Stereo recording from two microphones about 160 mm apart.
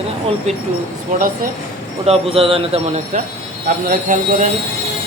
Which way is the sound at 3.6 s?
55° right (ahead or behind).